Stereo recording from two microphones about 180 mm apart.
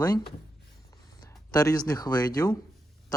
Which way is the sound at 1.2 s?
20° left (ahead or behind).